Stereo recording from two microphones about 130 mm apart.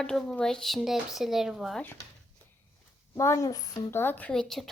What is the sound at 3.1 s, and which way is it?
A woman's voice, 25° left (ahead or behind).